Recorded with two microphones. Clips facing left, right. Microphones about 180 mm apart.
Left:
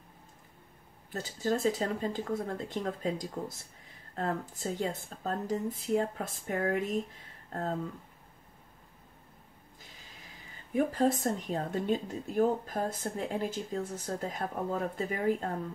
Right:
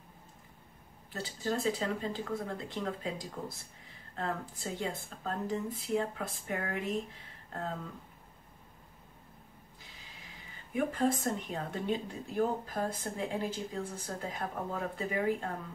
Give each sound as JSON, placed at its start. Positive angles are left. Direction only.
{"t": 1.1, "sound": "speech", "side_deg": 45}
{"t": 10.7, "sound": "speech", "side_deg": 35}